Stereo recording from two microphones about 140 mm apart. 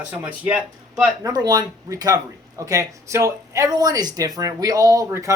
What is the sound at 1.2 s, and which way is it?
Speech, 30° right (ahead or behind).